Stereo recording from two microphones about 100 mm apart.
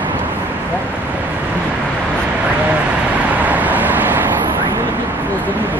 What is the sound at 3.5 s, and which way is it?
Vehicle, 15° right (ahead or behind).